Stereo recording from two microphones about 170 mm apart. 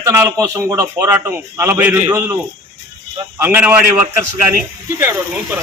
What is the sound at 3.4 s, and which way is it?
Speech, 10° right (ahead or behind).